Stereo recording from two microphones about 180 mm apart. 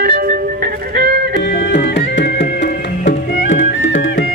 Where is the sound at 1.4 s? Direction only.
70° left (ahead or behind); by 4.3 s 90° left.